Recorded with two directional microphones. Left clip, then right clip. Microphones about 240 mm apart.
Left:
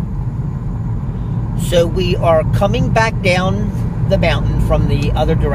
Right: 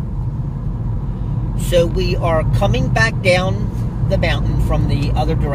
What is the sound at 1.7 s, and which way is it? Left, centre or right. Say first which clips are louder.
Speech: left 1 dB; left.